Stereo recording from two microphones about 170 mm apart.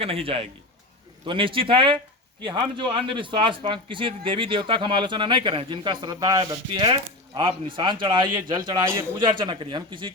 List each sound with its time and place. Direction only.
0.0 s a man's voice: 35° right (ahead or behind)